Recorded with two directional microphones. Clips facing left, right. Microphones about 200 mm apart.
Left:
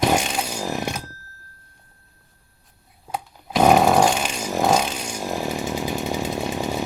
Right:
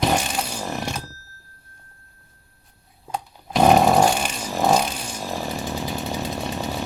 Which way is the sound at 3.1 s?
Centre (ahead or behind).